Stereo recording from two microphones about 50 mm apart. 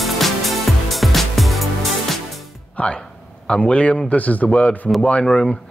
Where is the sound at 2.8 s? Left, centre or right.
Left.